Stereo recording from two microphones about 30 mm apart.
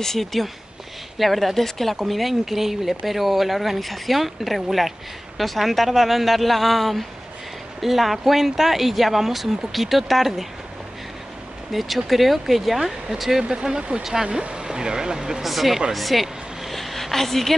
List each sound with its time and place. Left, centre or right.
0.0 s speech: centre
11.7 s speech: centre
13.4 s speech: right
15.4 s speech: centre
15.9 s vehicle: centre